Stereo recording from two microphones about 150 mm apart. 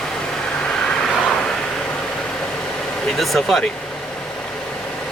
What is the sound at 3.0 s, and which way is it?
Speech, centre (ahead or behind).